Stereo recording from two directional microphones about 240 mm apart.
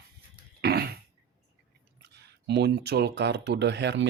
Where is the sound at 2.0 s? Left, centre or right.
Right.